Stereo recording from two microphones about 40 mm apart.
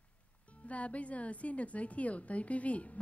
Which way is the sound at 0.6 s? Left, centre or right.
Left.